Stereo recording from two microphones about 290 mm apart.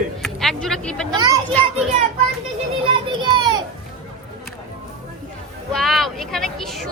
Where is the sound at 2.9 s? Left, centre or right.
Centre.